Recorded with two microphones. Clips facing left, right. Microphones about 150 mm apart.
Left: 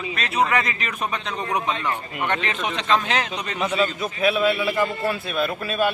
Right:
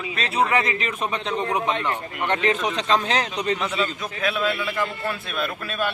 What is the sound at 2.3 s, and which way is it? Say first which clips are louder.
A man's voice: right 4 dB; 35° right (ahead or behind).